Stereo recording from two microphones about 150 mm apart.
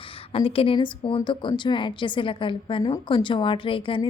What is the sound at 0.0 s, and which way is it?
A woman's voice, 35° left (ahead or behind).